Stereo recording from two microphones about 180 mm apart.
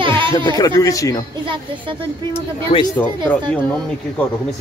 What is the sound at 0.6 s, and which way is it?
Speech, 20° left (ahead or behind).